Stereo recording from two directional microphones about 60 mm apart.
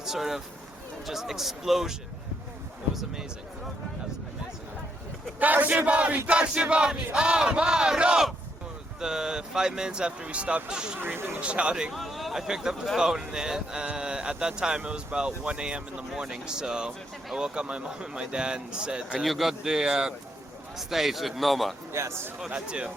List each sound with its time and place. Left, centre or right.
0.0 s a man's voice: centre
5.4 s battle cry: right
11.0 s speech: right
11.3 s battle cry: centre
11.9 s battle cry: centre
19.2 s battle cry: centre
20.7 s a man's voice: centre
21.9 s a man's voice: right
22.4 s battle cry: centre